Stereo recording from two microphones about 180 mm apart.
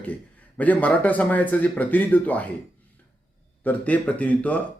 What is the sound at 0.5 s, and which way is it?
Speech, 10° left (ahead or behind).